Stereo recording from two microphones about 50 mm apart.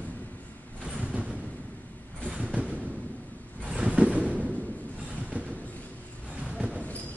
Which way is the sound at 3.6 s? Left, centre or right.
Right.